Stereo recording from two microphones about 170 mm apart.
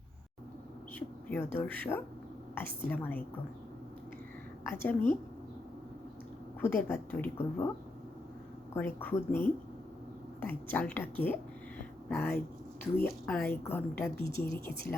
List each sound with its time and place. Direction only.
0.9 s a woman's voice: 10° left (ahead or behind)
4.6 s a woman's voice: 15° left (ahead or behind)
6.6 s a woman's voice: 15° left (ahead or behind)
8.7 s a woman's voice: 10° left (ahead or behind)